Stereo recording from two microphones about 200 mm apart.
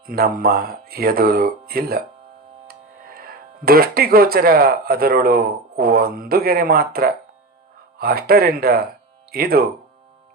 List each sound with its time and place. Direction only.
0.0 s speech: 45° right (ahead or behind)